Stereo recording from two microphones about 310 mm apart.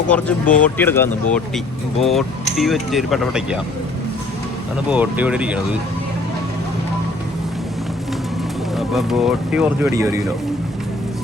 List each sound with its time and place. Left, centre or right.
0.1 s speech: centre
4.9 s speech: centre
8.7 s speech: centre